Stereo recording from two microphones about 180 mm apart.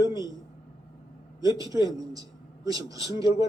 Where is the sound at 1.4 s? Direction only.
20° right (ahead or behind).